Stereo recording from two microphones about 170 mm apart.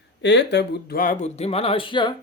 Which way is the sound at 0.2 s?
90° left.